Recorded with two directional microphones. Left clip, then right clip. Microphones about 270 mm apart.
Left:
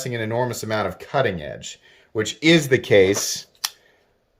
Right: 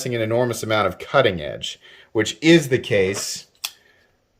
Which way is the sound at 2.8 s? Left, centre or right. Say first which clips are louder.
Left 4 dB; centre.